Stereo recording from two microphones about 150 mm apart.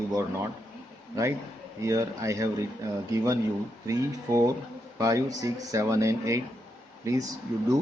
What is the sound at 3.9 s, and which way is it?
A man's voice, 20° right (ahead or behind).